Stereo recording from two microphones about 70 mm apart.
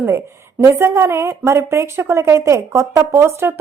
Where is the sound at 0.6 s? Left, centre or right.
Right.